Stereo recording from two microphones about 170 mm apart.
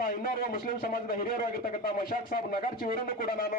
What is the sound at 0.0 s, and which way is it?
A man's voice, 60° left (ahead or behind).